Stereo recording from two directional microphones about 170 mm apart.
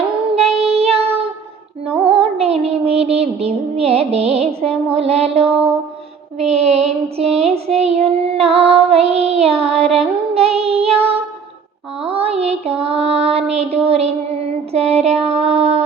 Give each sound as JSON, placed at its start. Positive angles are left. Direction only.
{"t": 0.3, "sound": "child singing", "side_deg": -35}
{"t": 2.0, "sound": "music", "side_deg": -35}
{"t": 4.9, "sound": "mantra", "side_deg": -35}
{"t": 6.4, "sound": "child singing", "side_deg": -40}